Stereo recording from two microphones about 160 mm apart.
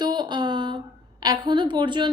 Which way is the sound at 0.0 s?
25° right (ahead or behind).